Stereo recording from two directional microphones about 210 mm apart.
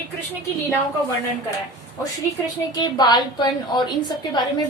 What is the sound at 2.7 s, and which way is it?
A woman's voice, 20° left (ahead or behind).